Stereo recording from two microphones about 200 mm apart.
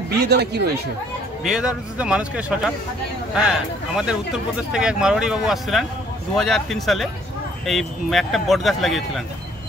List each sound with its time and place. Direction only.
0.3 s speech: 55° right (ahead or behind)
1.4 s speech: 5° right (ahead or behind)